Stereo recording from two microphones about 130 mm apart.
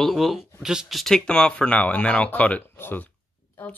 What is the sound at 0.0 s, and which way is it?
Speech, centre (ahead or behind).